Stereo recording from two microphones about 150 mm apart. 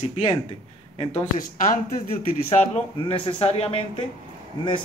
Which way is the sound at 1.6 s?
60° left (ahead or behind).